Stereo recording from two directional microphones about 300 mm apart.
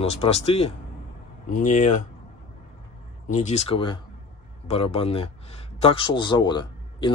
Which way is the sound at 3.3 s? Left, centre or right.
Left.